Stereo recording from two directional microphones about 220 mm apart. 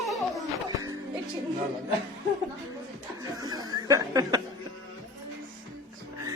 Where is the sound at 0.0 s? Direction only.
Centre (ahead or behind).